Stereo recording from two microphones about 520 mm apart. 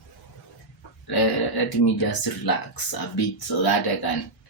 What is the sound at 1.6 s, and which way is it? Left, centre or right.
Speech, left.